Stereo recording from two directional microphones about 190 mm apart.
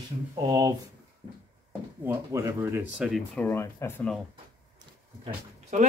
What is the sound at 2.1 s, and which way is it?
Speech, 15° right (ahead or behind).